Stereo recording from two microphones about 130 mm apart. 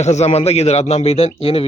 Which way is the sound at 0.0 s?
60° left (ahead or behind).